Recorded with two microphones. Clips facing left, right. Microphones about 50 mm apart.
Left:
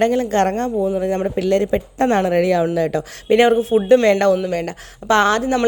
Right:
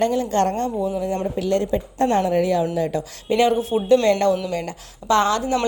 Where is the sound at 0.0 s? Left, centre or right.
Left.